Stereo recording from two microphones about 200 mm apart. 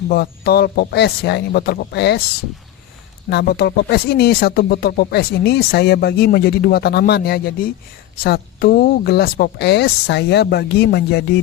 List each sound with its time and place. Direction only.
0.1 s speech: 50° left (ahead or behind)
3.2 s speech: 55° left (ahead or behind)